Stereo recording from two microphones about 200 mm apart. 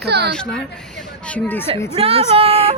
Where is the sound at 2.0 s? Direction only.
30° right (ahead or behind).